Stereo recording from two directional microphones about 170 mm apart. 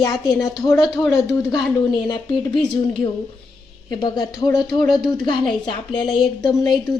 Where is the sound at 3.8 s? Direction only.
25° left (ahead or behind).